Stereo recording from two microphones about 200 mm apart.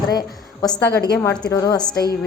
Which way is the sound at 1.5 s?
15° left (ahead or behind).